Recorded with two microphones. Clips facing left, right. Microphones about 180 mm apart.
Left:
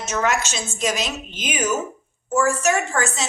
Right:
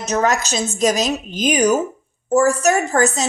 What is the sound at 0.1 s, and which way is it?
A woman's voice, 40° right (ahead or behind).